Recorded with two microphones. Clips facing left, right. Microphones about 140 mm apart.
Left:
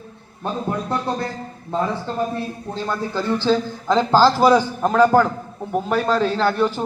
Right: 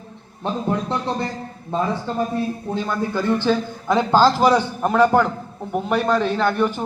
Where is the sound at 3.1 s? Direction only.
15° right (ahead or behind).